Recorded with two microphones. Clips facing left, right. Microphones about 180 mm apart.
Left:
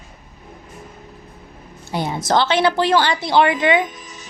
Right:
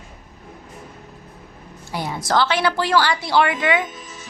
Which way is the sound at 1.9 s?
25° left (ahead or behind).